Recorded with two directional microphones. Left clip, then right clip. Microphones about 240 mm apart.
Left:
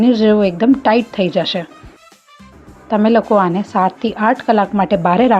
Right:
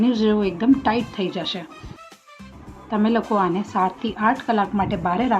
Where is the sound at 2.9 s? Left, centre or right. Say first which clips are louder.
Left 9 dB; left.